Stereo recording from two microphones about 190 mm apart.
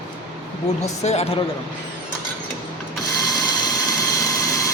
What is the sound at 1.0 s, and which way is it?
Speech, 35° left (ahead or behind).